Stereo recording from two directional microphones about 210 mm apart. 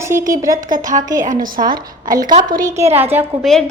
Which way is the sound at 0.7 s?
40° right (ahead or behind).